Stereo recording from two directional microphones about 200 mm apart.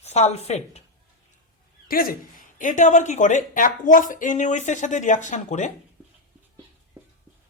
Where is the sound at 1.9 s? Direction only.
45° left (ahead or behind).